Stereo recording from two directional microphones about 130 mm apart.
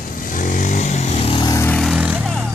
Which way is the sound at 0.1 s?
90° left.